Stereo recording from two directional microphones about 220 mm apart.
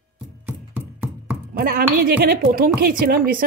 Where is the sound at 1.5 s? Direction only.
45° right (ahead or behind).